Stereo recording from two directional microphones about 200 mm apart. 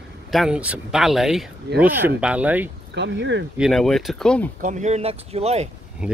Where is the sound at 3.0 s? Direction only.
60° right (ahead or behind).